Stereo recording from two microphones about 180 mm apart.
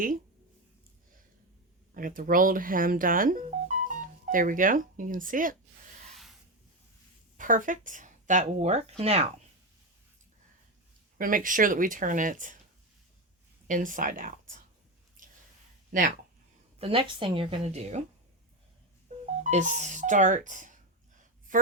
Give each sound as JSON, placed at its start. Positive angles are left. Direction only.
{"t": 1.9, "sound": "speech", "side_deg": -50}
{"t": 7.3, "sound": "speech", "side_deg": -45}
{"t": 11.2, "sound": "speech", "side_deg": -50}
{"t": 13.7, "sound": "speech", "side_deg": -45}
{"t": 15.2, "sound": "a sound", "side_deg": -50}
{"t": 15.9, "sound": "speech", "side_deg": -45}
{"t": 16.7, "sound": "speech", "side_deg": -30}
{"t": 19.2, "sound": "speech", "side_deg": -40}
{"t": 21.2, "sound": "a sound", "side_deg": -50}